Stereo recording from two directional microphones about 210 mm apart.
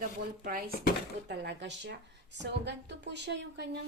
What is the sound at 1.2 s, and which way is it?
A woman's voice, 55° right (ahead or behind).